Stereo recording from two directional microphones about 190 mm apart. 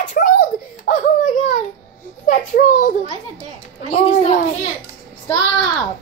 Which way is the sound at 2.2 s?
45° left (ahead or behind).